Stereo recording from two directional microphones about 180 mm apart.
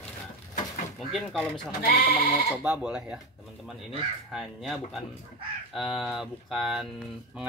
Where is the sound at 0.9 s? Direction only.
Centre (ahead or behind).